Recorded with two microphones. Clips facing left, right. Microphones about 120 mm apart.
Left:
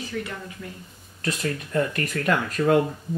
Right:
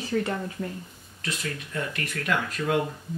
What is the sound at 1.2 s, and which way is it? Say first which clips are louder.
Speech: left 6 dB; 40° left (ahead or behind).